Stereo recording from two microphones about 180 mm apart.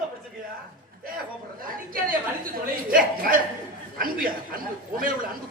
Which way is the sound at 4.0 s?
50° right (ahead or behind).